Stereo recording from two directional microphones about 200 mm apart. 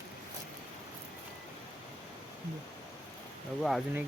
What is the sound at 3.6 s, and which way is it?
Speech, centre (ahead or behind).